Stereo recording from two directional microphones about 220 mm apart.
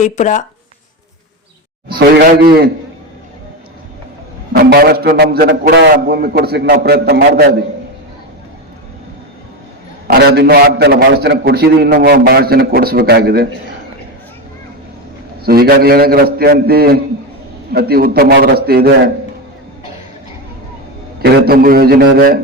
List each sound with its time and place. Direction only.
0.0 s speech: 35° left (ahead or behind)
1.9 s a man's voice: 45° right (ahead or behind)
4.5 s a man's voice: 45° right (ahead or behind)
10.1 s a man's voice: 45° right (ahead or behind)
15.4 s a man's voice: 45° right (ahead or behind)
21.2 s a man's voice: 45° right (ahead or behind)